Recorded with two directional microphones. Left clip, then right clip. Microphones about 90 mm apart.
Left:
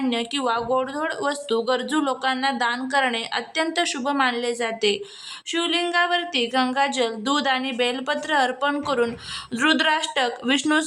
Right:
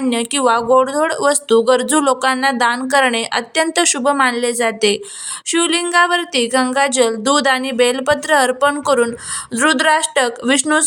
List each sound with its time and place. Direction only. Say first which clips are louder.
0.1 s a woman's voice: right 11 dB; 45° right (ahead or behind)